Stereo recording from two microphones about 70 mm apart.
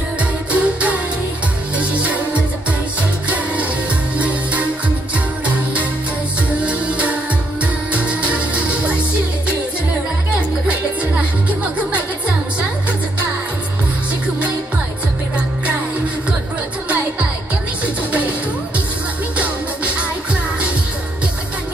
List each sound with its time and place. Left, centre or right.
0.5 s music: centre
4.2 s music: right
6.6 s music: centre
10.7 s music: centre
19.3 s music: centre